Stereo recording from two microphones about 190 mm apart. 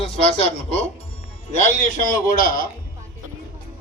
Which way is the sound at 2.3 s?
45° left (ahead or behind).